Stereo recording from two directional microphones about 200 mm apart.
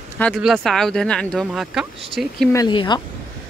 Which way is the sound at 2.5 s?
20° left (ahead or behind).